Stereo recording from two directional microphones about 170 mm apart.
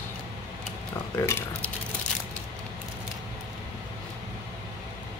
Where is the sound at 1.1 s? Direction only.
15° left (ahead or behind).